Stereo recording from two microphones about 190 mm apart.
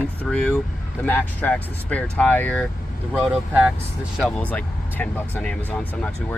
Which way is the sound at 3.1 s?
5° right (ahead or behind).